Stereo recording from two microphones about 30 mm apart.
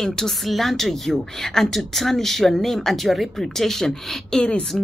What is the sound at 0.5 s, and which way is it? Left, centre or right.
Speech, centre.